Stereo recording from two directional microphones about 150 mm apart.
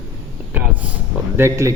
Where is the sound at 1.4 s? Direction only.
20° right (ahead or behind).